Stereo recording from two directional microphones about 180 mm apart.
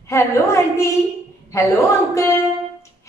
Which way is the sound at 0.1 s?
15° left (ahead or behind).